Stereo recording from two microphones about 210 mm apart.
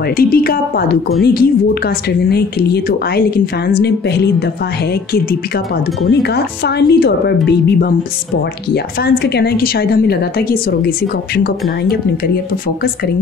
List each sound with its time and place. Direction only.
0.2 s a woman's voice: 45° left (ahead or behind)
6.0 s a woman's voice: 50° left (ahead or behind)
9.0 s a woman's voice: 50° left (ahead or behind)